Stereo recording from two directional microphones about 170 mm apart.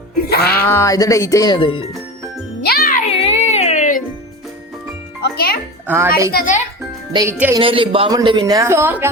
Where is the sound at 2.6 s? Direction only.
65° left (ahead or behind).